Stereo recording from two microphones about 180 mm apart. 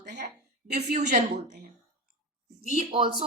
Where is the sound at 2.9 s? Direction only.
30° right (ahead or behind).